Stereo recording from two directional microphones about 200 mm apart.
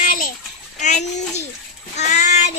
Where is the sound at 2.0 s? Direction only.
35° left (ahead or behind).